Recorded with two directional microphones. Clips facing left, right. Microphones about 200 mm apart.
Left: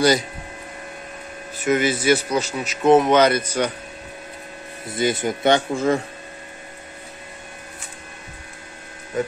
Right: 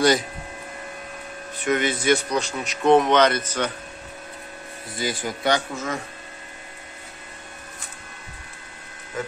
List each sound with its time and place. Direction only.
1.6 s speech: 5° left (ahead or behind)
4.8 s speech: 25° left (ahead or behind)